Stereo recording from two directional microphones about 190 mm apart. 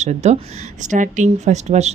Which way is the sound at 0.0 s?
35° right (ahead or behind).